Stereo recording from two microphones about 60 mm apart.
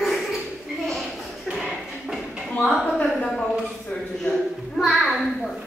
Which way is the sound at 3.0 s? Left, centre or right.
Centre.